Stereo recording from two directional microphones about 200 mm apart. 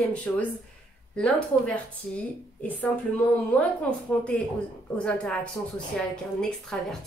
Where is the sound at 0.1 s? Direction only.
5° left (ahead or behind).